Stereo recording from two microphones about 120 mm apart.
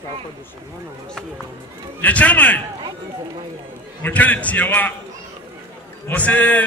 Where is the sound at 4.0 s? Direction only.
15° left (ahead or behind).